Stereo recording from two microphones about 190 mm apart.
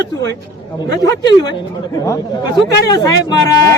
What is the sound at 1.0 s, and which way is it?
Speech, 20° left (ahead or behind).